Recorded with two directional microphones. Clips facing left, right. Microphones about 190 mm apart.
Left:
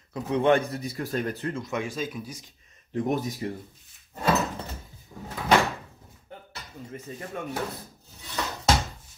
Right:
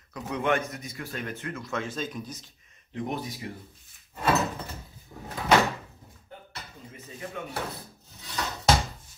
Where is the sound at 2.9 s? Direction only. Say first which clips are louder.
Left 6 dB; 45° left (ahead or behind).